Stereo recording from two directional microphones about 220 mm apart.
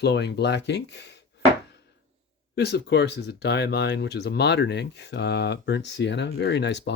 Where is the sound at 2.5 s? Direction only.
50° left (ahead or behind).